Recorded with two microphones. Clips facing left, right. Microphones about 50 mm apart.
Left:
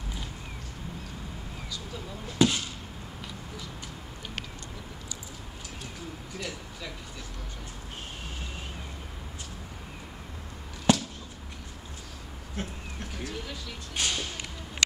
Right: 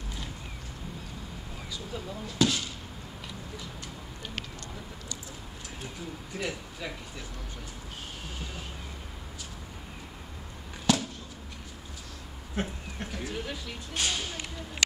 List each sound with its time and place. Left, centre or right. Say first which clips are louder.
2.2 s speech: left 3 dB; centre
6.3 s speech: right 4 dB; centre
10.9 s a sound: left 2 dB; left
12.5 s speech: right 4 dB; centre
13.9 s speech: even; centre